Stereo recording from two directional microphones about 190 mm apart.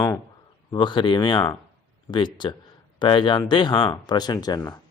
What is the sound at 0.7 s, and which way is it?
Speech, 25° left (ahead or behind).